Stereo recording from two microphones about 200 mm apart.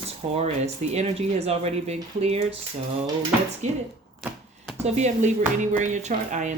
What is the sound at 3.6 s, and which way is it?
Speech, 35° right (ahead or behind).